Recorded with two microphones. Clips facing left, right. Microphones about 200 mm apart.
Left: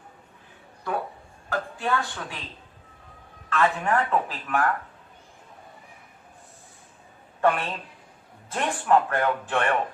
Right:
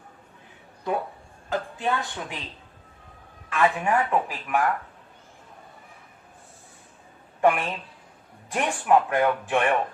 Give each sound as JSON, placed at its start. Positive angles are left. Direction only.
{"t": 0.9, "sound": "a woman's voice", "side_deg": -20}
{"t": 3.5, "sound": "speech", "side_deg": -10}
{"t": 7.4, "sound": "speech", "side_deg": -15}